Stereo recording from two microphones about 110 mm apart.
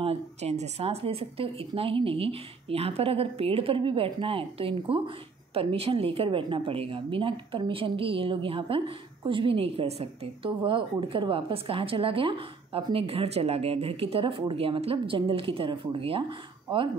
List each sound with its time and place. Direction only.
0.0 s speech: 70° right (ahead or behind); by 16.9 s 50° right (ahead or behind)